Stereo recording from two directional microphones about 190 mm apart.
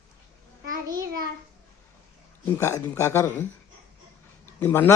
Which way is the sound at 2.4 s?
15° left (ahead or behind).